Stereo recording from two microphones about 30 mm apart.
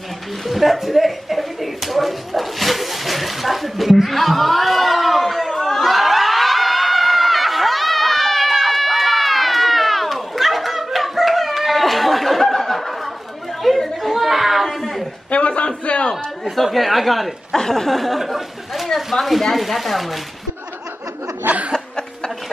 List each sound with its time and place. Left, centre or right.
0.5 s speech: centre
5.6 s a sound: centre
5.9 s snicker: centre
13.6 s chatter: centre
14.1 s child singing: centre
15.3 s a sound: left
16.6 s speech: centre
17.6 s speech: centre
21.4 s chuckle: right